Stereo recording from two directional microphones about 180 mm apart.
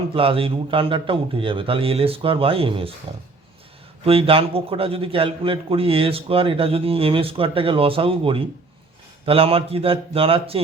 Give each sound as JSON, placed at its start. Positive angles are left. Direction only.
{"t": 0.1, "sound": "a man's voice", "side_deg": -30}
{"t": 4.0, "sound": "a man's voice", "side_deg": -30}